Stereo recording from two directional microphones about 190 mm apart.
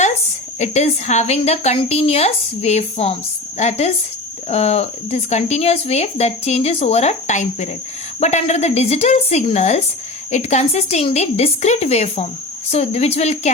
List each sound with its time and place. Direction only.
0.6 s speech: 35° left (ahead or behind)